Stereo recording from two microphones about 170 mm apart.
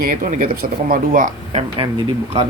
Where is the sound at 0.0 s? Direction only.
55° right (ahead or behind).